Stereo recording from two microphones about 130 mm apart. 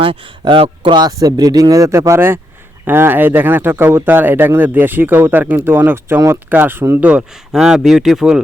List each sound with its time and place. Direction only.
0.0 s speech: 45° right (ahead or behind); by 8.4 s 5° right (ahead or behind)